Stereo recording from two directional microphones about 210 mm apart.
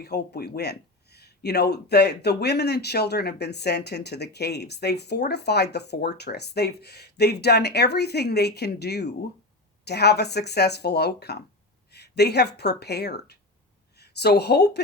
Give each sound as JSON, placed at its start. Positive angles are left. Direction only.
{"t": 0.0, "sound": "speech", "side_deg": 50}